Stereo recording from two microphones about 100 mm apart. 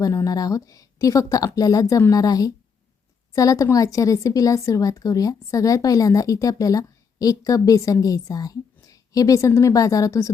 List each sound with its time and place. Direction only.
0.0 s a woman's voice: 35° left (ahead or behind)